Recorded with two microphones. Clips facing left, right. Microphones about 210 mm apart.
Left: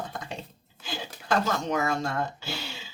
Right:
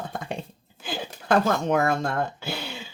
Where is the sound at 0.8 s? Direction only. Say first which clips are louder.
Right 4 dB; 55° right (ahead or behind).